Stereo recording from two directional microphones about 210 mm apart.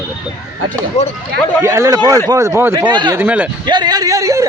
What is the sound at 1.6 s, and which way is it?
A man's voice, 15° right (ahead or behind).